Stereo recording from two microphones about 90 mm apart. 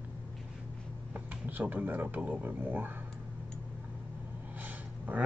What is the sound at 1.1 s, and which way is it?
Speech, 20° right (ahead or behind).